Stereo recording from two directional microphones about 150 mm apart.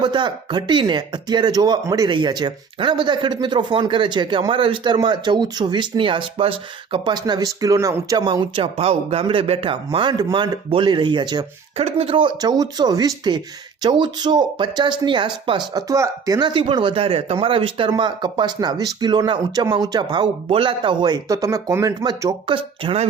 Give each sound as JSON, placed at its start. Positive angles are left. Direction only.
{"t": 0.0, "sound": "speech", "side_deg": -30}
{"t": 11.8, "sound": "speech", "side_deg": -40}